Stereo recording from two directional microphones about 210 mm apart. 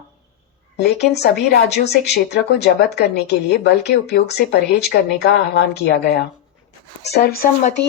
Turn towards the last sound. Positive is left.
turn(degrees=45)  # may be behind; listen again after turning